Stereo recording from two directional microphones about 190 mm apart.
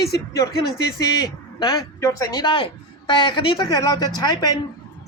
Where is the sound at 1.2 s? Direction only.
20° left (ahead or behind).